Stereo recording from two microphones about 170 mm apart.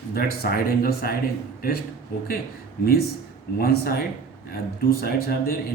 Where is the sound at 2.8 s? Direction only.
60° left (ahead or behind).